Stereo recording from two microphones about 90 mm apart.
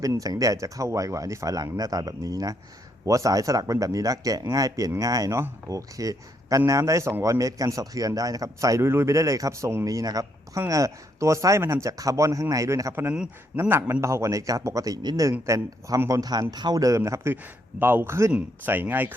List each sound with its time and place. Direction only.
0.0 s speech: 40° right (ahead or behind)
17.3 s speech: 20° right (ahead or behind)
18.3 s speech: 20° right (ahead or behind)